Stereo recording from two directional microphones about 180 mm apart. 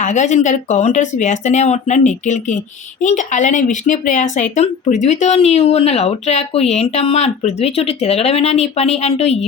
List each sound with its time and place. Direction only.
0.0 s a woman's voice: 40° left (ahead or behind)